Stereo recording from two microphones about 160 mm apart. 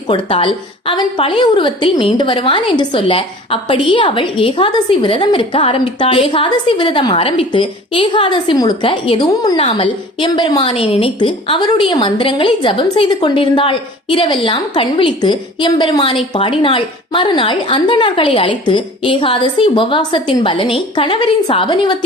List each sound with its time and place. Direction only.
0.1 s a woman's voice: 35° left (ahead or behind)